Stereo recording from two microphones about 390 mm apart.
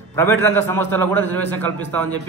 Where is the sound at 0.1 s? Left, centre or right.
Centre.